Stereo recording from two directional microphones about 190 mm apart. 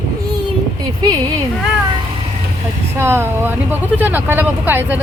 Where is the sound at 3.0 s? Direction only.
10° right (ahead or behind).